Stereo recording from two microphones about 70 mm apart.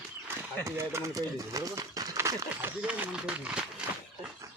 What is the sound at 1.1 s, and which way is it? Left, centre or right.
Speech, right.